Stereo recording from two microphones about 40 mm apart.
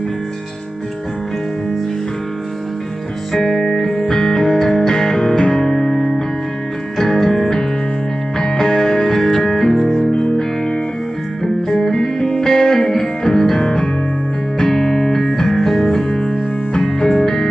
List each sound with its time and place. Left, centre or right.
3.3 s music: centre
11.7 s music: centre